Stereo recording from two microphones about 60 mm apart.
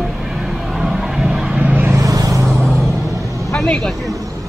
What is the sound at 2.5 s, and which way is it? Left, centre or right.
Music, centre.